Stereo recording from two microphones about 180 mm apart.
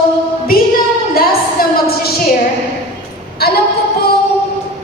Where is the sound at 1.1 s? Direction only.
55° left (ahead or behind).